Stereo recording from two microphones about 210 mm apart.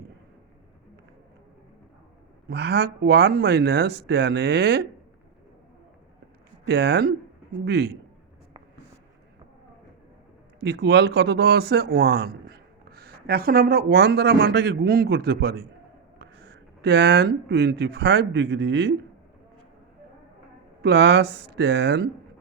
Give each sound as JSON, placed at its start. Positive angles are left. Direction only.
{"t": 2.5, "sound": "speech", "side_deg": -50}
{"t": 6.7, "sound": "speech", "side_deg": -50}
{"t": 10.6, "sound": "speech", "side_deg": -50}
{"t": 20.8, "sound": "speech", "side_deg": -55}